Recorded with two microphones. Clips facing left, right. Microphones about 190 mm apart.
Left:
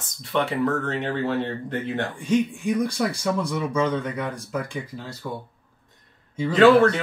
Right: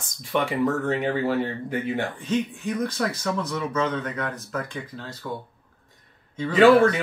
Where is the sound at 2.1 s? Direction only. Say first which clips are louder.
Left 4 dB; 10° left (ahead or behind).